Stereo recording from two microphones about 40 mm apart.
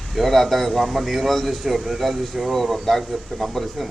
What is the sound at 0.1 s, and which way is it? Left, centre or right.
A man's voice, centre.